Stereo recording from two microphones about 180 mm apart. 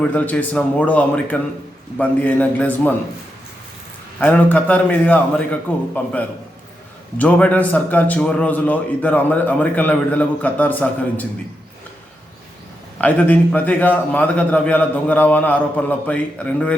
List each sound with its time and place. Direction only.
0.0 s a man's voice: 10° left (ahead or behind)
4.2 s a man's voice: 10° left (ahead or behind)
13.0 s a man's voice: 10° left (ahead or behind)